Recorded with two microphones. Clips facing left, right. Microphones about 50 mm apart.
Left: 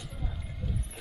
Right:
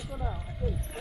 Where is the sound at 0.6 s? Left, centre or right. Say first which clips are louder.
Right 4 dB; centre.